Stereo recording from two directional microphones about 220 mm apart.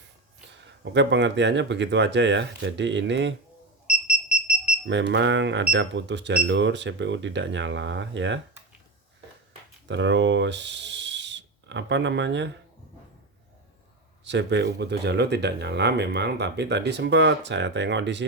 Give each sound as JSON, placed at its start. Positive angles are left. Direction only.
{"t": 0.9, "sound": "speech", "side_deg": -55}
{"t": 4.9, "sound": "speech", "side_deg": -55}
{"t": 9.8, "sound": "speech", "side_deg": -55}
{"t": 14.3, "sound": "speech", "side_deg": -55}